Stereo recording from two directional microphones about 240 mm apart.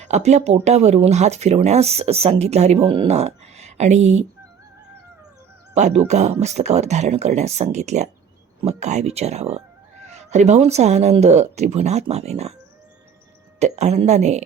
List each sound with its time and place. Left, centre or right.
0.0 s speech: right
5.7 s speech: right
13.6 s speech: right